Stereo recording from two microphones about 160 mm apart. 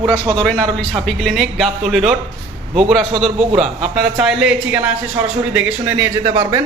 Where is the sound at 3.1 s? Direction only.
35° right (ahead or behind).